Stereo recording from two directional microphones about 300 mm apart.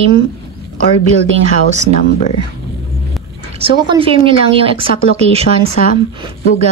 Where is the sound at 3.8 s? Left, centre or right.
Centre.